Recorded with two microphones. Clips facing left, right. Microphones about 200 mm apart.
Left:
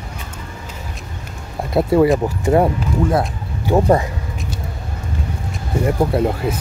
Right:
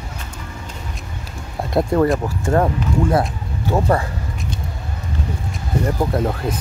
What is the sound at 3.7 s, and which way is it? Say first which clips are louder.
Speech: left 4 dB; 15° left (ahead or behind).